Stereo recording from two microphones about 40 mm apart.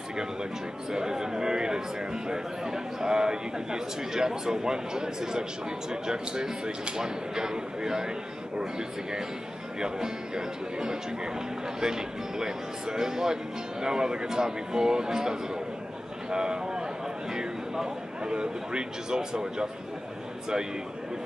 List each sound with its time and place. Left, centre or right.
0.9 s speech: centre
16.3 s a sound: centre
17.3 s speech: centre